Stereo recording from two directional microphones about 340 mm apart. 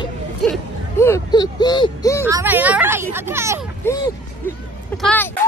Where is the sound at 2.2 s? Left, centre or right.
Centre.